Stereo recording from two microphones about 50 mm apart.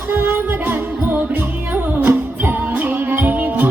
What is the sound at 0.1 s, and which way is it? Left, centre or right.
Music, right.